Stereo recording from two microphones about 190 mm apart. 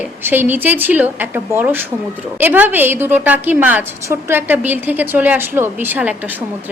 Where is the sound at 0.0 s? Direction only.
10° right (ahead or behind).